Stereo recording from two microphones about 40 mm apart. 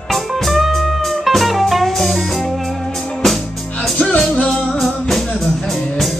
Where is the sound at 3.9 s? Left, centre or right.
Left.